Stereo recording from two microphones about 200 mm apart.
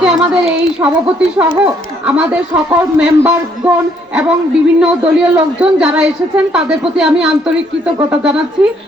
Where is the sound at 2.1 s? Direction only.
5° right (ahead or behind).